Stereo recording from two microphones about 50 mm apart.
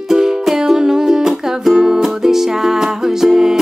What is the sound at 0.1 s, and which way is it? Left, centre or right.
Music, centre.